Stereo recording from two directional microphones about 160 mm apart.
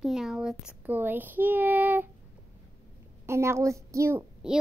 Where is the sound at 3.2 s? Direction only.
15° right (ahead or behind).